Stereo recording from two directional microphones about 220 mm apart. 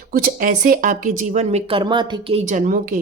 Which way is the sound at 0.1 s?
45° right (ahead or behind).